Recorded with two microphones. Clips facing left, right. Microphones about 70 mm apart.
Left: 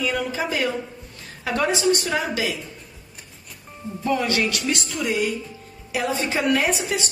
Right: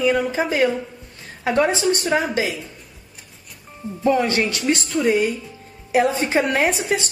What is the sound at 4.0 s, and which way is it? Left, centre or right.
A woman's voice, right.